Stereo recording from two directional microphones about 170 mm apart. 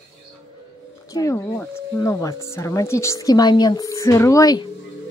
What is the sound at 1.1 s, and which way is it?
Speech, 20° left (ahead or behind).